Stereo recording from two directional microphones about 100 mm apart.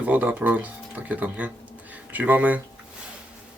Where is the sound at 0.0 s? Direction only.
15° right (ahead or behind).